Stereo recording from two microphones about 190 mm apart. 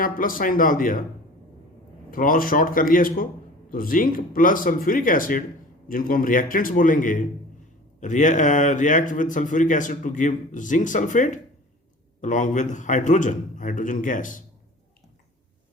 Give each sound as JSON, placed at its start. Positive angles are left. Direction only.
{"t": 0.0, "sound": "speech", "side_deg": 45}
{"t": 2.0, "sound": "speech", "side_deg": 45}